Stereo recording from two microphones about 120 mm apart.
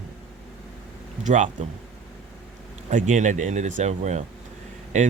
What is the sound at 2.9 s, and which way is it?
Speech, 90° right.